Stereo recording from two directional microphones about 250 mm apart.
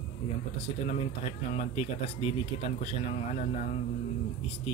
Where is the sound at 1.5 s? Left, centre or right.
Left.